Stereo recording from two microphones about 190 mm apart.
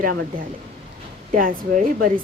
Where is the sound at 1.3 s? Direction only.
45° right (ahead or behind).